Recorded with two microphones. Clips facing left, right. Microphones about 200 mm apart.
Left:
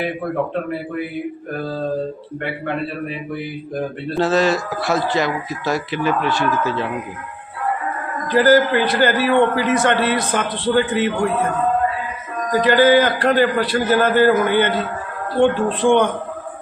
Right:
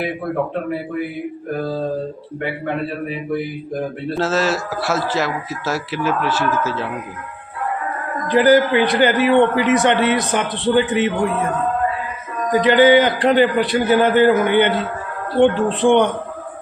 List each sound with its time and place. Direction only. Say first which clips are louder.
1.5 s a man's voice: right 2 dB; 10° right (ahead or behind)
4.1 s speech: left 3 dB; centre (ahead or behind)
8.3 s a man's voice: right 1 dB; 15° right (ahead or behind)
12.5 s a man's voice: right 1 dB; 20° right (ahead or behind)